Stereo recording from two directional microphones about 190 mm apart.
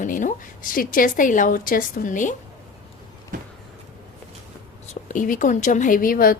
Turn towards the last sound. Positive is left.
turn(degrees=50)  # may be behind; listen again after turning